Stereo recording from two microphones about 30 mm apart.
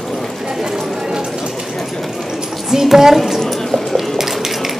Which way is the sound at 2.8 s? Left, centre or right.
Centre.